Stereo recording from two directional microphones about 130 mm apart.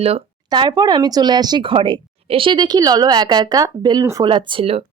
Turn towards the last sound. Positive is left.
turn(degrees=-50)  # may be behind; listen again after turning